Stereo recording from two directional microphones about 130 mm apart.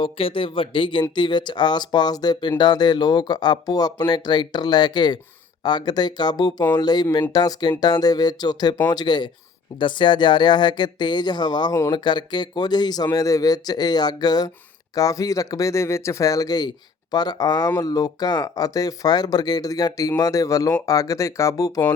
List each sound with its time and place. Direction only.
0.0 s speech: 45° left (ahead or behind); by 21.8 s 25° left (ahead or behind)